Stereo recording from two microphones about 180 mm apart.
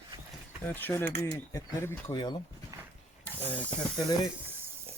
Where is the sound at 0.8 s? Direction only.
10° left (ahead or behind).